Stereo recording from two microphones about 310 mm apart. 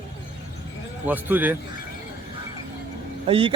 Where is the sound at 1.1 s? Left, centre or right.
Centre.